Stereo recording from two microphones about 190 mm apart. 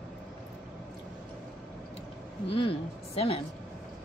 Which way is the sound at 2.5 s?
30° left (ahead or behind).